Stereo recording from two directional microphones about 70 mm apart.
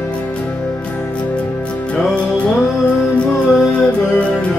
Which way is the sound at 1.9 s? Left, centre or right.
Centre.